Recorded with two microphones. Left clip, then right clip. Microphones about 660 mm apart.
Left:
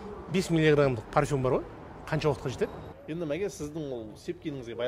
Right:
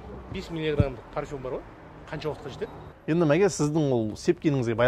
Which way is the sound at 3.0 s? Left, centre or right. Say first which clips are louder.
Right 11 dB; right.